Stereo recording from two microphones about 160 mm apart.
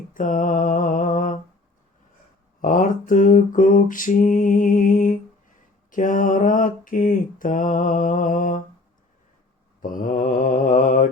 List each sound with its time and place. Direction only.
0.1 s mantra: 55° left (ahead or behind)
2.6 s mantra: 55° left (ahead or behind)
9.8 s mantra: 55° left (ahead or behind)